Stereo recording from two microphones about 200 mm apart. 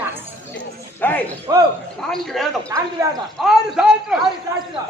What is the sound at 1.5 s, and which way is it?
Speech, 20° right (ahead or behind).